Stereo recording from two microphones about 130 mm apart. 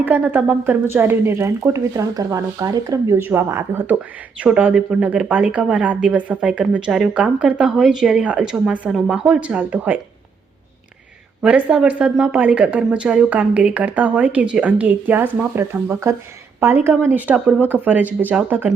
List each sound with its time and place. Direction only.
0.0 s speech: 15° right (ahead or behind)
11.4 s speech: 5° right (ahead or behind)